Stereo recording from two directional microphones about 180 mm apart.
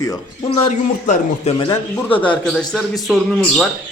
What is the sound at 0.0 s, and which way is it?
Speech, 20° left (ahead or behind).